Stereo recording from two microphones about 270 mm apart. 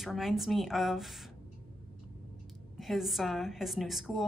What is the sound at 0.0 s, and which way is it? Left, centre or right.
A woman's voice, centre.